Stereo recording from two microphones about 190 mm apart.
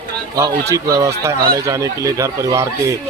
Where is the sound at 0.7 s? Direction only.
15° right (ahead or behind).